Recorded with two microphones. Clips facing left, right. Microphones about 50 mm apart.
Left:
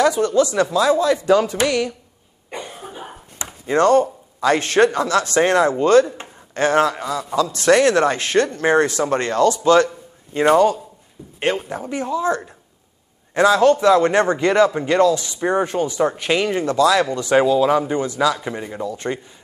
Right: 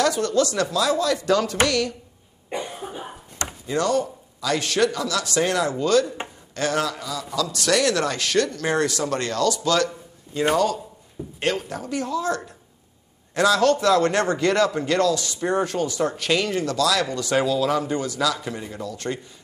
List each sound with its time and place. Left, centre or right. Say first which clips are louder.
0.0 s a man's voice: left 4 dB; centre
2.5 s cough: right 2 dB; centre
3.6 s a man's voice: left 8 dB; left